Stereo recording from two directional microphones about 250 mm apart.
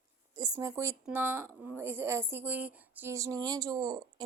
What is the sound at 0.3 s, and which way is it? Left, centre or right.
Speech, centre.